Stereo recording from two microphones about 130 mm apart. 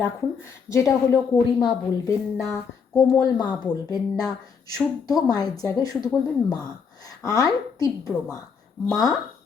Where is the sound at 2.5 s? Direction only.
25° left (ahead or behind).